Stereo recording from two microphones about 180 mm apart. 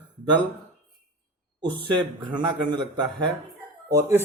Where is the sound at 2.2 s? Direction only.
25° right (ahead or behind).